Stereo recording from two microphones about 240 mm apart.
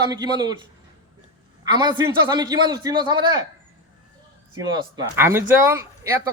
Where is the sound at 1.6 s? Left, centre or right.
Centre.